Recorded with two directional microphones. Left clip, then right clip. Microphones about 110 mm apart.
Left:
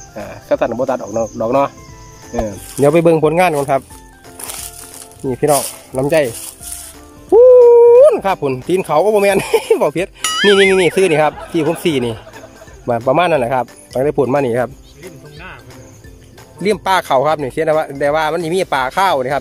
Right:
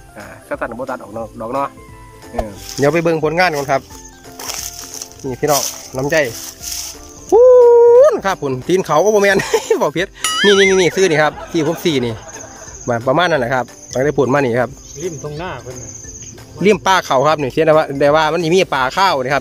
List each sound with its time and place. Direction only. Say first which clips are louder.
0.3 s speech: left 7 dB; 25° left (ahead or behind)
5.2 s speech: left 2 dB; 25° left (ahead or behind)
7.2 s music: left 1 dB; 10° left (ahead or behind)
7.6 s speech: left 1 dB; 5° left (ahead or behind)
15.3 s speech: right 8 dB; 55° right (ahead or behind)
16.6 s speech: right 2 dB; 5° right (ahead or behind)